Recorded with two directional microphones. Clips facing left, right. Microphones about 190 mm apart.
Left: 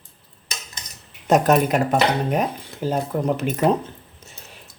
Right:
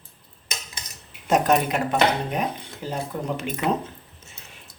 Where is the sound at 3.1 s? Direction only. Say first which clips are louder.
Left 7 dB; 45° left (ahead or behind).